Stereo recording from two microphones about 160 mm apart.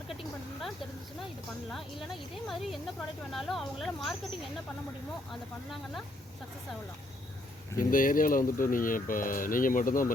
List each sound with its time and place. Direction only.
0.1 s a sound: centre (ahead or behind)
1.2 s speech: centre (ahead or behind)
5.3 s speech: centre (ahead or behind)
7.8 s speech: 60° left (ahead or behind)